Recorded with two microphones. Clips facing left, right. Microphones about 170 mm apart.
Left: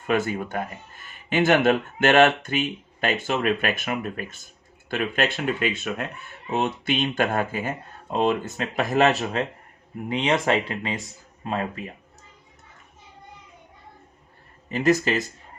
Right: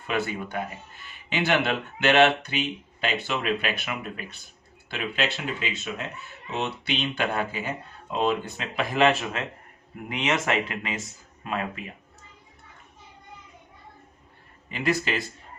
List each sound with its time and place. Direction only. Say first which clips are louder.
0.1 s speech: left 4 dB; 45° left (ahead or behind)
14.7 s speech: left 6 dB; 40° left (ahead or behind)